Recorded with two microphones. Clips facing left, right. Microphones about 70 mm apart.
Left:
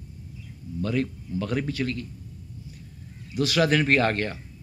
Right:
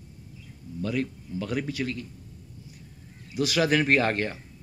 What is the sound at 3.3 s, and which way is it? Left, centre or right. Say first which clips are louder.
Speech: left 1 dB; centre.